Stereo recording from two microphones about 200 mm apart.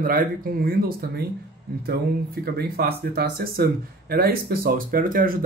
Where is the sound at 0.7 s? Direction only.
50° right (ahead or behind).